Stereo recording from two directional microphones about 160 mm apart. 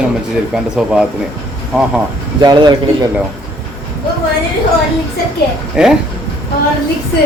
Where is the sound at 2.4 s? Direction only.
25° right (ahead or behind).